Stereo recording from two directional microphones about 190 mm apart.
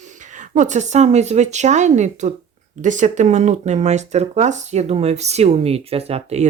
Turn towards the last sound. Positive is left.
turn(degrees=-35)  # may be behind; listen again after turning